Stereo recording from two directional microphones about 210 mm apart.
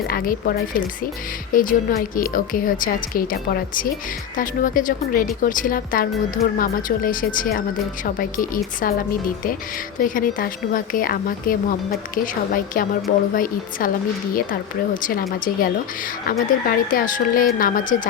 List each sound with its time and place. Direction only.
0.1 s a woman's voice: 45° left (ahead or behind)
15.0 s a woman's voice: 40° left (ahead or behind)